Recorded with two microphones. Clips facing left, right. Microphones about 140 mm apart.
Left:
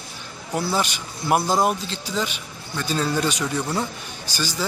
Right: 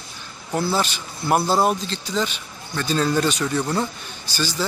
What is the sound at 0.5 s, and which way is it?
Speech, 10° left (ahead or behind).